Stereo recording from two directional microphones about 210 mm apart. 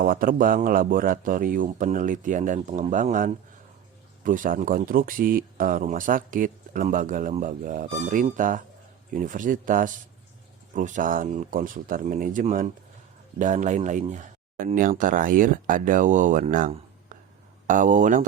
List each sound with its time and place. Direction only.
0.0 s speech: 40° right (ahead or behind)